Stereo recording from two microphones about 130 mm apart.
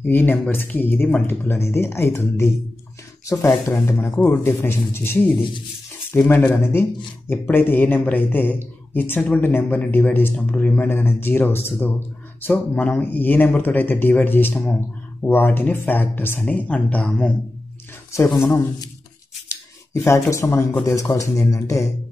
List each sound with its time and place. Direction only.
0.0 s a man's voice: 15° left (ahead or behind)
18.1 s speech: 20° left (ahead or behind)